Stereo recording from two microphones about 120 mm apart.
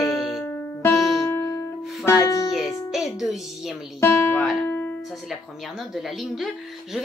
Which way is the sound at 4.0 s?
10° left (ahead or behind).